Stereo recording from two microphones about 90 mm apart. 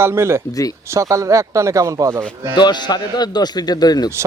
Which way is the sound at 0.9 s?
35° right (ahead or behind).